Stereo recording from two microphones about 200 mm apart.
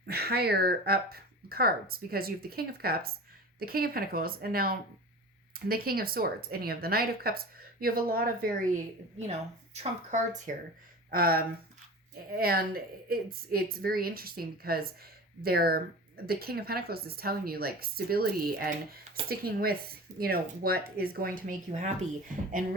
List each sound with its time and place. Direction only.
0.0 s speech: 50° right (ahead or behind)
9.7 s speech: 35° right (ahead or behind)